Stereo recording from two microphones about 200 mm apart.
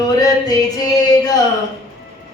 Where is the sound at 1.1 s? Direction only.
20° left (ahead or behind).